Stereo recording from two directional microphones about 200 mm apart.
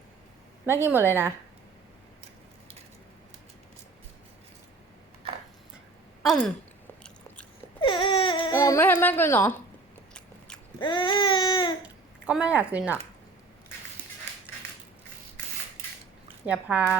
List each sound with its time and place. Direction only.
0.6 s speech: 10° right (ahead or behind)
6.2 s speech: 5° left (ahead or behind)
7.8 s baby cry: 25° left (ahead or behind)
8.5 s a woman's voice: 15° left (ahead or behind)
10.8 s baby cry: 25° left (ahead or behind)
11.8 s a child's voice: 5° right (ahead or behind)
16.5 s speech: 5° right (ahead or behind)